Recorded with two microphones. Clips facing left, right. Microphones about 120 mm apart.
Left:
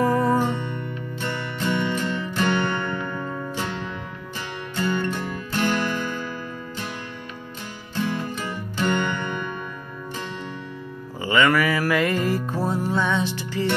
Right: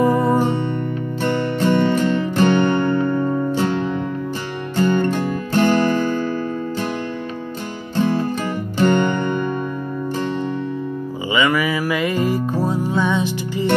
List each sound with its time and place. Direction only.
0.0 s music: 25° right (ahead or behind)
7.9 s music: 35° right (ahead or behind)
11.2 s music: 10° right (ahead or behind)